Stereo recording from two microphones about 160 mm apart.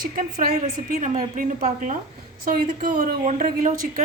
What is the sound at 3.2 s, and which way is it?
Speech, 55° right (ahead or behind).